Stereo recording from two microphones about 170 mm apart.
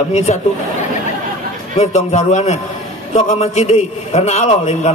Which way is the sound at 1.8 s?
40° left (ahead or behind).